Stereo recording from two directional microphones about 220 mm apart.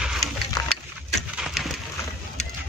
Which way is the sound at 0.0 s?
Centre (ahead or behind).